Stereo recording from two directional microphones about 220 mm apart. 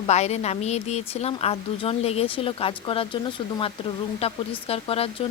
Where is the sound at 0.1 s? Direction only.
30° left (ahead or behind).